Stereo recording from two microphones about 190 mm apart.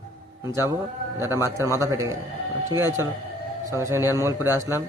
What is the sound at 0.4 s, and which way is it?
A man's voice, 15° right (ahead or behind).